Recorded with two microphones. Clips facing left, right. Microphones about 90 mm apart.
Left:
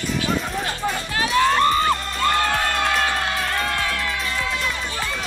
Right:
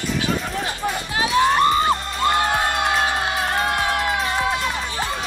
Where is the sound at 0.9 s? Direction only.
20° right (ahead or behind).